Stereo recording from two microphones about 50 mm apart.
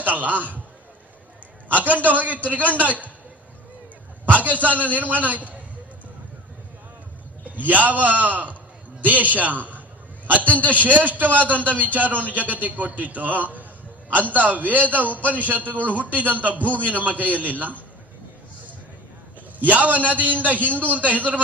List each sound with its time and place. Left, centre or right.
0.0 s a man's voice: right
1.7 s a man's voice: right
4.3 s a man's voice: right
7.5 s a man's voice: right
19.5 s a man's voice: right